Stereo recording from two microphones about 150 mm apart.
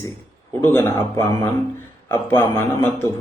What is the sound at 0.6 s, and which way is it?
Speech, 15° left (ahead or behind).